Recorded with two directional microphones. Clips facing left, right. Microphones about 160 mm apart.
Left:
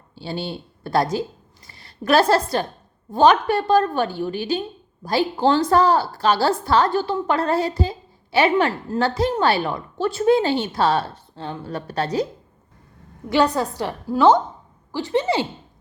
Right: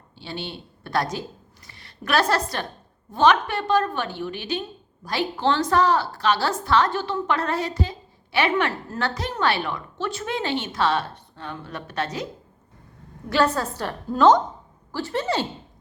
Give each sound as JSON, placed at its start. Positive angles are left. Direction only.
{"t": 0.2, "sound": "a woman's voice", "side_deg": 35}
{"t": 13.3, "sound": "a woman's voice", "side_deg": 15}